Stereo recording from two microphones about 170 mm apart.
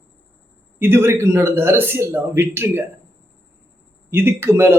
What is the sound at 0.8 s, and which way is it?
Speech, 15° right (ahead or behind).